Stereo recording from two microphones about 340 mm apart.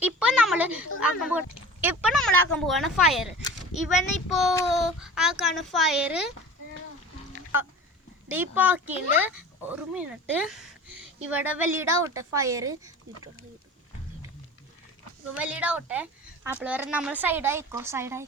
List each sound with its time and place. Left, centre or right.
0.0 s a sound: centre
0.9 s speech: centre
8.3 s speech: centre
15.3 s speech: centre